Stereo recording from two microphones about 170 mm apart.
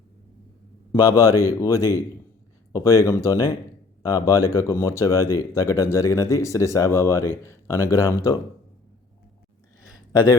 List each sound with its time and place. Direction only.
0.9 s speech: 20° left (ahead or behind)
10.1 s speech: 20° left (ahead or behind)